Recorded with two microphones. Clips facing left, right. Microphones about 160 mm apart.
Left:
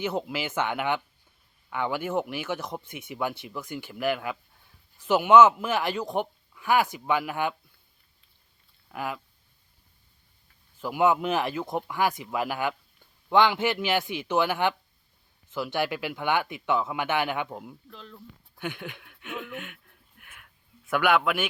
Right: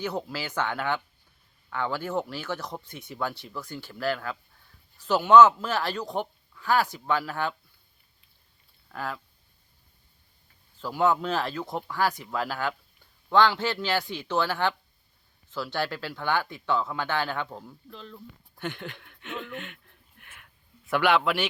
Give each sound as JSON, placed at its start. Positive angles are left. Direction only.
{"t": 0.0, "sound": "speech", "side_deg": 20}
{"t": 8.9, "sound": "speech", "side_deg": 15}
{"t": 10.8, "sound": "speech", "side_deg": 15}
{"t": 17.8, "sound": "speech", "side_deg": 0}
{"t": 18.6, "sound": "a sound", "side_deg": 5}